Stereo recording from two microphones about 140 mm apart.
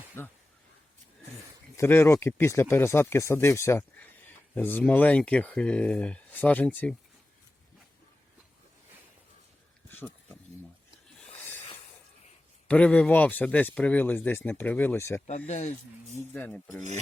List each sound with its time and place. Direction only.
0.2 s speech: 15° left (ahead or behind)
1.7 s speech: 15° left (ahead or behind)
9.9 s a sound: 15° left (ahead or behind)
12.6 s speech: 10° left (ahead or behind)
15.3 s speech: 55° left (ahead or behind)
16.1 s speech: 10° left (ahead or behind)